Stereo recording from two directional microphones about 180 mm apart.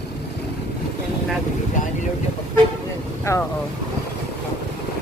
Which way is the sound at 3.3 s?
15° left (ahead or behind).